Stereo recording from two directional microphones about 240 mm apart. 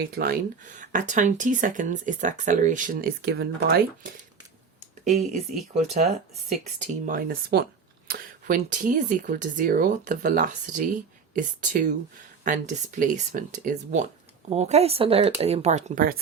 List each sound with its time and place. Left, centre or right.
0.0 s speech: right
5.7 s speech: right